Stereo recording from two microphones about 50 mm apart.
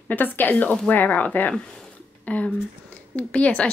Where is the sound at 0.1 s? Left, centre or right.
Left.